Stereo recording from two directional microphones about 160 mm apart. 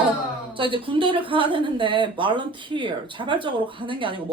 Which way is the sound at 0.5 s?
35° right (ahead or behind).